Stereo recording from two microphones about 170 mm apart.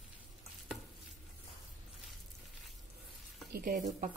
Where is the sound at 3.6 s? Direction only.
55° right (ahead or behind).